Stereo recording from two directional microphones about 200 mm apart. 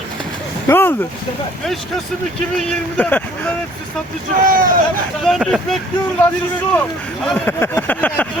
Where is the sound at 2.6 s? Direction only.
10° left (ahead or behind).